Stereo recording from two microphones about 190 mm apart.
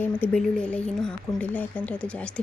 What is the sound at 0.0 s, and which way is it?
Speech, 5° left (ahead or behind).